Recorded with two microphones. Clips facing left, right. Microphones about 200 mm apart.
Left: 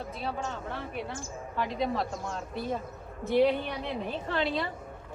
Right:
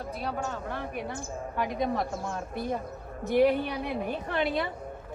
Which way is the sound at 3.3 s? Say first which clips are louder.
Right 1 dB; 50° right (ahead or behind).